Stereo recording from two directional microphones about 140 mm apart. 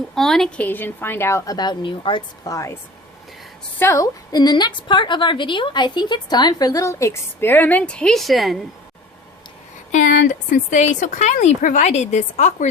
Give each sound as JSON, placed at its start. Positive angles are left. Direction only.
{"t": 0.1, "sound": "a woman's voice", "side_deg": 5}
{"t": 2.4, "sound": "a woman's voice", "side_deg": 25}
{"t": 3.8, "sound": "a woman's voice", "side_deg": 20}
{"t": 9.9, "sound": "speech", "side_deg": 65}